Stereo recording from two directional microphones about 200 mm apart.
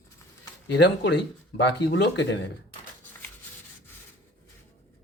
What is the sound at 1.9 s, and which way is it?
Speech, 60° left (ahead or behind).